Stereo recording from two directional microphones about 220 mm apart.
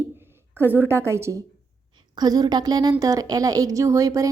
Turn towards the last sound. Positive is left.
turn(degrees=-15)  # may be behind; listen again after turning